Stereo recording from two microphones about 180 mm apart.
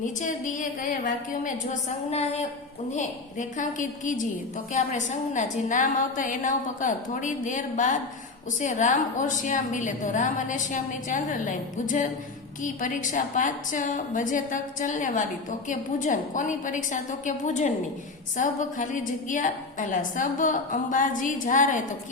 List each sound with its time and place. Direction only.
0.0 s a woman's voice: 45° left (ahead or behind)